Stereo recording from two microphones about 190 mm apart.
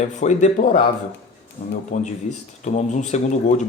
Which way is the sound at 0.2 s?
40° left (ahead or behind).